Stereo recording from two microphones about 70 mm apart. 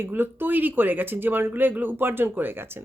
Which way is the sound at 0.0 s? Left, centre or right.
Right.